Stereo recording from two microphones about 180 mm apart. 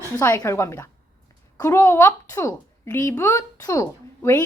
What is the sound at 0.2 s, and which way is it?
A woman's voice, 20° left (ahead or behind).